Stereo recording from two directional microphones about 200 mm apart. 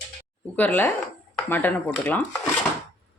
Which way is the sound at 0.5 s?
10° left (ahead or behind).